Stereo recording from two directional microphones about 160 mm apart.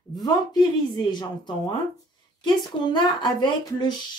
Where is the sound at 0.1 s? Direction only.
25° left (ahead or behind).